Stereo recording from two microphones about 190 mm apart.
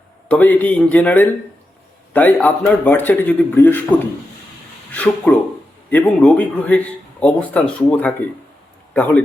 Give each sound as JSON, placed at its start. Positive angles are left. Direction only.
{"t": 0.3, "sound": "speech", "side_deg": 10}
{"t": 4.9, "sound": "speech", "side_deg": 5}